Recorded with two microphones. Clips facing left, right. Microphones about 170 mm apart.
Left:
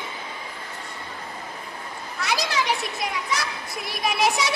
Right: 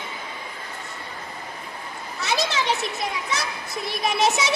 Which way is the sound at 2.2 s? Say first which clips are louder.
Right 1 dB; 25° right (ahead or behind).